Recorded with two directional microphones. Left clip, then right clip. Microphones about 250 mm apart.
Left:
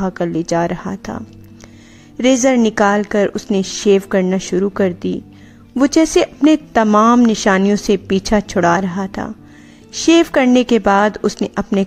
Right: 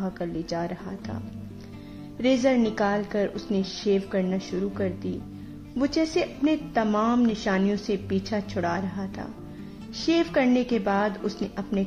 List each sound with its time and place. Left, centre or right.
0.0 s a woman's voice: left